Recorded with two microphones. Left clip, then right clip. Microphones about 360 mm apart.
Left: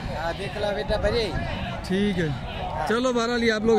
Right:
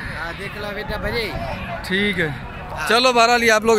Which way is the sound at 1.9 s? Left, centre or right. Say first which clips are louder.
Right 6 dB; centre.